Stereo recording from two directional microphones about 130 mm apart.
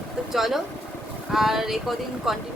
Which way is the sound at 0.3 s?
Centre (ahead or behind).